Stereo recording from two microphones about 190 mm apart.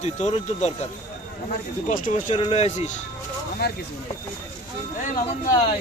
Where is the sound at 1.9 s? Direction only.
35° left (ahead or behind).